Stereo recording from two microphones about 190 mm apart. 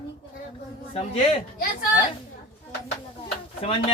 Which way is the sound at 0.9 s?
30° left (ahead or behind).